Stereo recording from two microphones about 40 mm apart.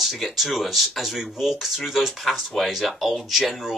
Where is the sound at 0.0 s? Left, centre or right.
Centre.